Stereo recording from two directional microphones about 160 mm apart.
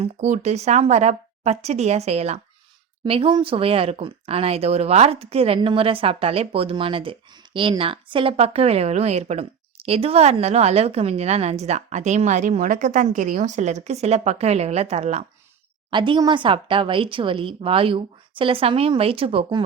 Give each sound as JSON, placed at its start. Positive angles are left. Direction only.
{"t": 0.0, "sound": "speech", "side_deg": -45}
{"t": 15.9, "sound": "speech", "side_deg": -30}